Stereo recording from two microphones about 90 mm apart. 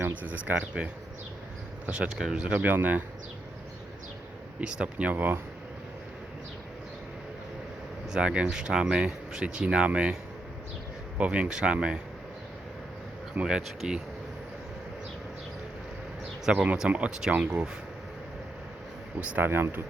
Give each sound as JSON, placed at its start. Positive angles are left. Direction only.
{"t": 0.2, "sound": "speech", "side_deg": -20}
{"t": 1.9, "sound": "speech", "side_deg": -5}
{"t": 4.6, "sound": "speech", "side_deg": -15}
{"t": 8.1, "sound": "speech", "side_deg": -10}
{"t": 11.2, "sound": "speech", "side_deg": -10}
{"t": 13.3, "sound": "speech", "side_deg": -10}
{"t": 16.5, "sound": "speech", "side_deg": -10}
{"t": 19.2, "sound": "speech", "side_deg": -15}
{"t": 19.5, "sound": "speech", "side_deg": -25}